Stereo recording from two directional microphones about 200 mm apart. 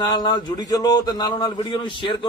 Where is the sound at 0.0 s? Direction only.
20° left (ahead or behind).